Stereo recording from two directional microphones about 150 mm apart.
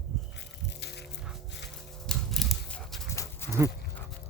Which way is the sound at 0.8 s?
90° left.